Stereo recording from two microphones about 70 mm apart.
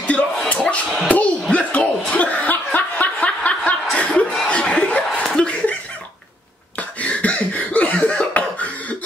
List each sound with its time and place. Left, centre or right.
0.5 s music: centre
1.0 s a sound: left
1.5 s chuckle: left
6.8 s cough: centre